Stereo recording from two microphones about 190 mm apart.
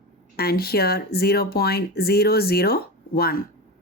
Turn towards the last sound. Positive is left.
turn(degrees=55)  # may be behind; listen again after turning